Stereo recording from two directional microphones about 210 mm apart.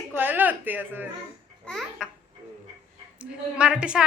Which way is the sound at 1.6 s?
5° left (ahead or behind).